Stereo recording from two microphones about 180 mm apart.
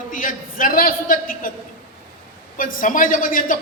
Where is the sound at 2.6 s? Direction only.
50° left (ahead or behind).